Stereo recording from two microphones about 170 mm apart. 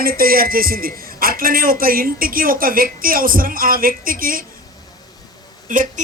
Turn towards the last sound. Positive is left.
turn(degrees=-50)  # may be behind; listen again after turning